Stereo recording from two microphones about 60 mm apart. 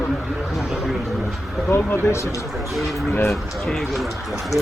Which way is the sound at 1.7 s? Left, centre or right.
Left.